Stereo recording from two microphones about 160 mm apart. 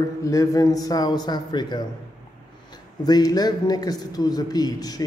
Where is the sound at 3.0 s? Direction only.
25° left (ahead or behind).